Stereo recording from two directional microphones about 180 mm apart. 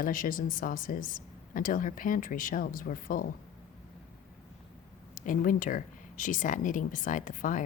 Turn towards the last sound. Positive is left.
turn(degrees=45)  # may be behind; listen again after turning